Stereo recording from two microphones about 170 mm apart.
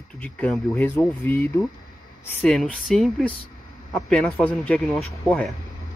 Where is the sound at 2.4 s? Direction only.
Centre (ahead or behind).